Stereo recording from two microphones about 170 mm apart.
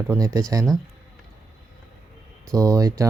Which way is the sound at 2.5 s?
20° right (ahead or behind).